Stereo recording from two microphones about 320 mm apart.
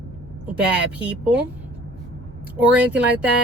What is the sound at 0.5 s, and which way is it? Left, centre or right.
Speech, centre.